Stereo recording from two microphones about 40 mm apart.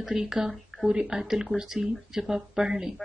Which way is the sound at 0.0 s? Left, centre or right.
Centre.